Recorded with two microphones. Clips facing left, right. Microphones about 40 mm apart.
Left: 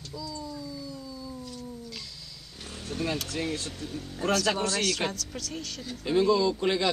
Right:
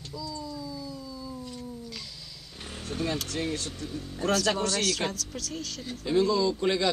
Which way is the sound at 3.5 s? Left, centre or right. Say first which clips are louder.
Even; left.